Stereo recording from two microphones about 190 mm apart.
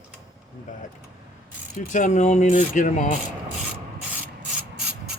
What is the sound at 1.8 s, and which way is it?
Coin, 40° left (ahead or behind).